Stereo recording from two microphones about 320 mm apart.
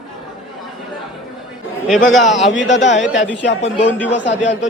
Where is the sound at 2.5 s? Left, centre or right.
Left.